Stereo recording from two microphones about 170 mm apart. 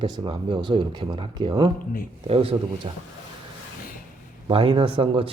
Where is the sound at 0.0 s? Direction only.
25° right (ahead or behind).